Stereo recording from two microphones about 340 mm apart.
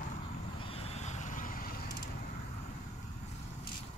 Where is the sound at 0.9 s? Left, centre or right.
Centre.